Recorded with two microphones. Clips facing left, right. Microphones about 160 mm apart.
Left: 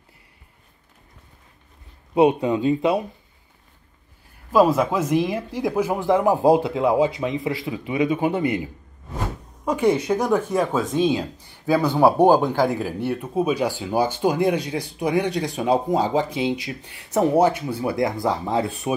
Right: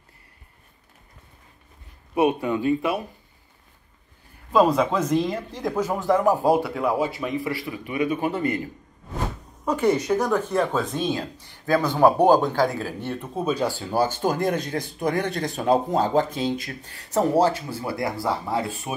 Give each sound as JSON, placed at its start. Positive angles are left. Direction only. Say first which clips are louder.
{"t": 2.1, "sound": "speech", "louder": "left 4 dB", "side_deg": 20}
{"t": 4.5, "sound": "speech", "louder": "left 2 dB", "side_deg": 5}
{"t": 9.7, "sound": "speech", "louder": "left 1 dB", "side_deg": 10}